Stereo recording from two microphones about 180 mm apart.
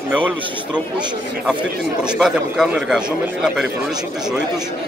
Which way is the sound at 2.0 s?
5° right (ahead or behind).